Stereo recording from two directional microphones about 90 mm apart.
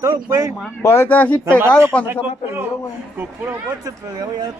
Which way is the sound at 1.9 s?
10° left (ahead or behind).